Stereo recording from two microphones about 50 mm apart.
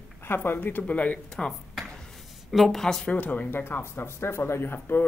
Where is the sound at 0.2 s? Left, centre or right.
Left.